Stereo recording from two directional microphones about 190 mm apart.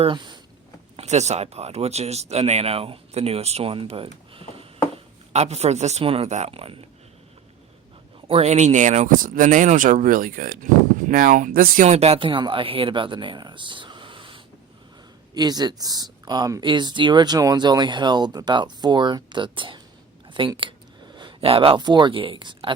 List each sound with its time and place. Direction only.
0.0 s speech: 25° right (ahead or behind)
0.9 s speech: 35° right (ahead or behind)
8.3 s speech: 35° right (ahead or behind)